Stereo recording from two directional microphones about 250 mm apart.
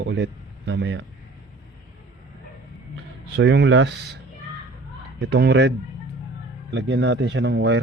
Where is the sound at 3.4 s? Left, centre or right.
Right.